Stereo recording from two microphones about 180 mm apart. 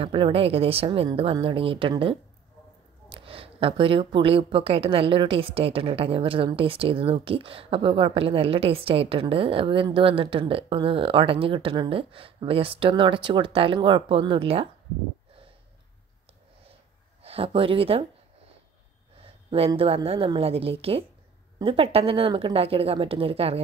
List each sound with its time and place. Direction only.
0.0 s a woman's voice: 30° right (ahead or behind)
17.2 s speech: 30° right (ahead or behind)
19.2 s a sound: 30° right (ahead or behind)
19.7 s a woman's voice: 30° right (ahead or behind)